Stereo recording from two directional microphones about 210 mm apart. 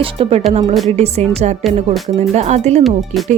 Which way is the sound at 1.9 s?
Centre (ahead or behind).